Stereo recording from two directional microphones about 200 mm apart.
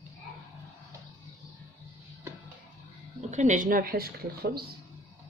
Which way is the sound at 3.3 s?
35° right (ahead or behind).